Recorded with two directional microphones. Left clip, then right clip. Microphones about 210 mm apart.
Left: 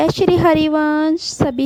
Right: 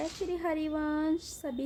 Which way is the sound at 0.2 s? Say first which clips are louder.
Left 19 dB; 50° left (ahead or behind).